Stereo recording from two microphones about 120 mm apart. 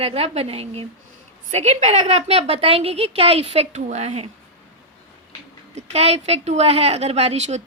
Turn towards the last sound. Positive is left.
turn(degrees=-65)  # may be behind; listen again after turning